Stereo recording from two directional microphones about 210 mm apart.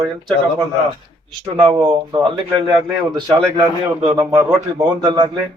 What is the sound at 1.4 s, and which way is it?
Speech, 20° right (ahead or behind).